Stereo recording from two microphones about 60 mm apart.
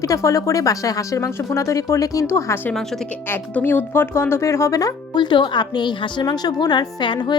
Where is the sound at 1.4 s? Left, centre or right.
Left.